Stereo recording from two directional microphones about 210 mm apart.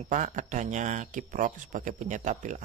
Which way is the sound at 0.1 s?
35° right (ahead or behind).